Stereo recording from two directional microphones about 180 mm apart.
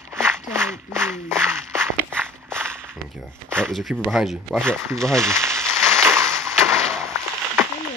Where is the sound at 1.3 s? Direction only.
5° left (ahead or behind).